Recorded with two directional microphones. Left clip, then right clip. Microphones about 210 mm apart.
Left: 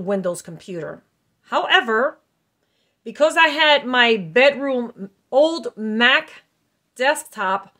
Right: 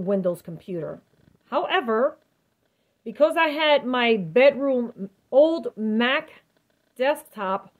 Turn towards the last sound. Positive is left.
turn(degrees=25)  # may be behind; listen again after turning